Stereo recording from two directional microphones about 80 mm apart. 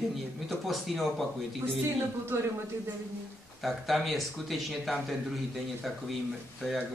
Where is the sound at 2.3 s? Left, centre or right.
Right.